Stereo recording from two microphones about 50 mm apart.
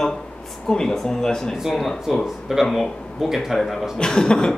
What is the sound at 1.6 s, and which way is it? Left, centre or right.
A man's voice, centre.